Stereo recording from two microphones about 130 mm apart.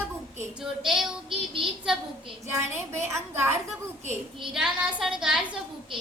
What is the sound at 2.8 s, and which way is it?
Speech, 20° right (ahead or behind).